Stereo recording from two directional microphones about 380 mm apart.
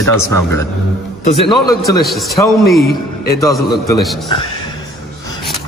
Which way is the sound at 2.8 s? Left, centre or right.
Left.